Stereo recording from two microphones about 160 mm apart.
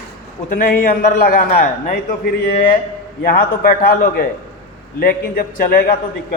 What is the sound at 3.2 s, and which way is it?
A man's voice, 60° left (ahead or behind).